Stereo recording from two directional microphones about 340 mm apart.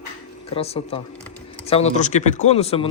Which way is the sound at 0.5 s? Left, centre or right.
Centre.